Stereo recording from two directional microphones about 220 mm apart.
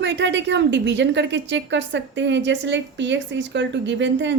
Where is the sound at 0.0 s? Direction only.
55° right (ahead or behind).